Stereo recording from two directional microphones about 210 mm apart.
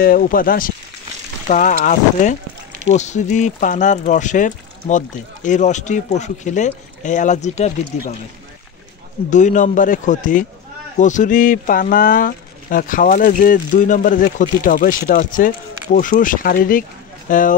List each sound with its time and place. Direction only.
0.0 s speech: 40° left (ahead or behind)
9.3 s speech: 35° left (ahead or behind)